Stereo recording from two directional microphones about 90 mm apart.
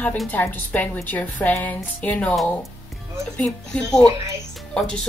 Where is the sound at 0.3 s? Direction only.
20° left (ahead or behind).